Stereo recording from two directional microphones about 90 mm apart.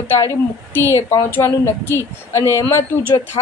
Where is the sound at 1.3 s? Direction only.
25° left (ahead or behind).